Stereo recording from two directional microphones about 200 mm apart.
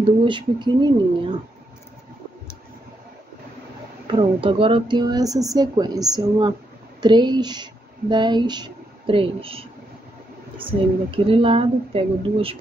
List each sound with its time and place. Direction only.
0.0 s a woman's voice: 25° right (ahead or behind)
4.1 s a woman's voice: 25° right (ahead or behind)